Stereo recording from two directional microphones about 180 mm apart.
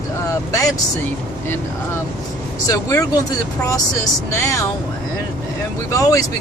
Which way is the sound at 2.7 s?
20° left (ahead or behind).